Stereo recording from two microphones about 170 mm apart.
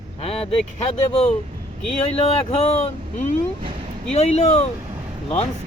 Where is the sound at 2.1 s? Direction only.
35° left (ahead or behind).